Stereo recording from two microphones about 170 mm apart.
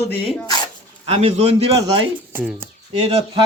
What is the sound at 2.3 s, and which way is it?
Speech, 10° right (ahead or behind).